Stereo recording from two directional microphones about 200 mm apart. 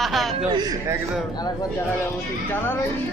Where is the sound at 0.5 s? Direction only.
20° right (ahead or behind).